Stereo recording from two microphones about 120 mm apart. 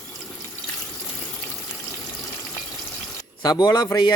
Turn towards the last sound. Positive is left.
turn(degrees=35)  # may be behind; listen again after turning